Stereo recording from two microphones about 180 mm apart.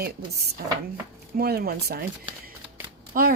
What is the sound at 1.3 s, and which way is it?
Speech, 60° right (ahead or behind).